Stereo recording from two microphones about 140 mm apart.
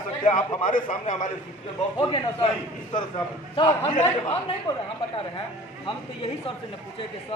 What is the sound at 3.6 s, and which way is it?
Speech, 35° left (ahead or behind).